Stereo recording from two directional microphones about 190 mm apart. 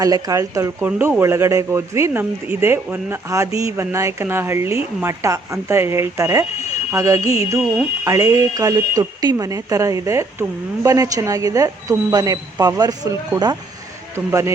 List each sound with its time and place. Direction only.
0.0 s speech: 20° right (ahead or behind)